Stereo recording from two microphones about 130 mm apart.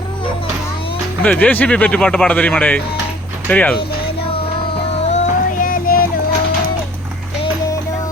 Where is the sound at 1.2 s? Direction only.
15° left (ahead or behind).